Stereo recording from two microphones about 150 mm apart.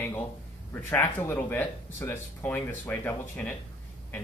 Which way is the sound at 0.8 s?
15° left (ahead or behind).